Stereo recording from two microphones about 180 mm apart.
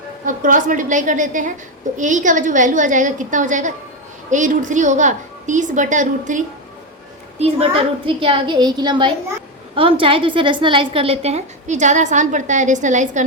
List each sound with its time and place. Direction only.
0.3 s a woman's voice: 45° right (ahead or behind)